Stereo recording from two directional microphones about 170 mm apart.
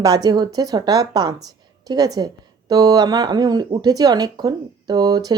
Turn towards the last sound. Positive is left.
turn(degrees=-25)  # may be behind; listen again after turning